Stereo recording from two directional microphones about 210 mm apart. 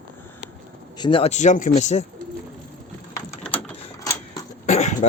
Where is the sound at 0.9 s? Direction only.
25° left (ahead or behind).